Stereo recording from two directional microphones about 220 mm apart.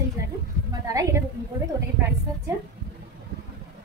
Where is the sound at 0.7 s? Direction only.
15° right (ahead or behind).